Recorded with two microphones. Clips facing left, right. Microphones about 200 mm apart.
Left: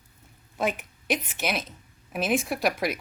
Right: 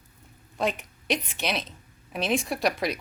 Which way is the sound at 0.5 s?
5° left (ahead or behind).